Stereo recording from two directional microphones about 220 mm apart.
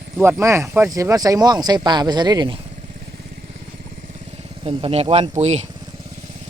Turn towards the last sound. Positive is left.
turn(degrees=-30)  # may be behind; listen again after turning